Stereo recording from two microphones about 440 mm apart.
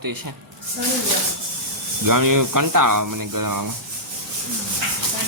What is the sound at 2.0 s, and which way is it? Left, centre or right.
A man's voice, right.